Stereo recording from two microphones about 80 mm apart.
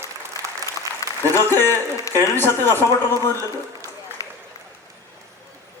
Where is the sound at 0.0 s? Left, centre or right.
Right.